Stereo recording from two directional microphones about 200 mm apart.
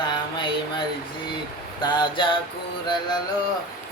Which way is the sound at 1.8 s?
20° left (ahead or behind).